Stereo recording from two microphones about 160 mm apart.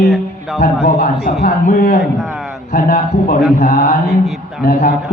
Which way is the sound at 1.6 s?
55° left (ahead or behind).